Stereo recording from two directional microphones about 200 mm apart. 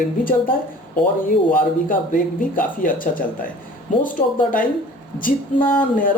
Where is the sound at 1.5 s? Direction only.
45° left (ahead or behind).